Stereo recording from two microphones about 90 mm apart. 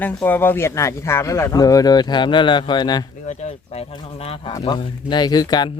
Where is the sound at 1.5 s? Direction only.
45° left (ahead or behind).